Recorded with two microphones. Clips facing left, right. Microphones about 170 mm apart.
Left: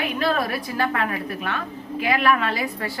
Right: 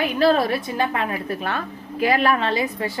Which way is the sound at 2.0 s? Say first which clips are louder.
Right 2 dB; 35° right (ahead or behind).